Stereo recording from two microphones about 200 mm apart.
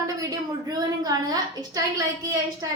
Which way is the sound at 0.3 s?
20° right (ahead or behind).